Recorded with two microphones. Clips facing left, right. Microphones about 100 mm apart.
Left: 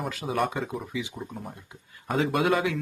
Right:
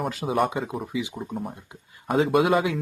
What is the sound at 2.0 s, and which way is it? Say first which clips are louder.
Speech: right 4 dB; 20° right (ahead or behind).